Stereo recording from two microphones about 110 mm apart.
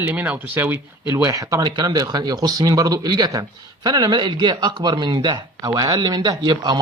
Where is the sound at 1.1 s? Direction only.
30° right (ahead or behind).